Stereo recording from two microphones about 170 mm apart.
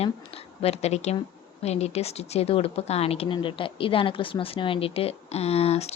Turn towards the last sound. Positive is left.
turn(degrees=40)  # may be behind; listen again after turning